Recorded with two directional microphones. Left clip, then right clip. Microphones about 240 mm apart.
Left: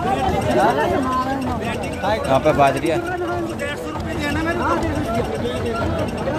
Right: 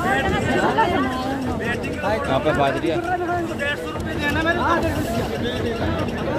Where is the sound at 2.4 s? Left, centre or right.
Left.